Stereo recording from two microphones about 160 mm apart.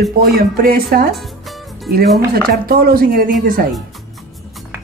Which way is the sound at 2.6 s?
70° right (ahead or behind).